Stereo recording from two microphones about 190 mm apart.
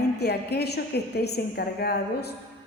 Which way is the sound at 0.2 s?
60° left (ahead or behind).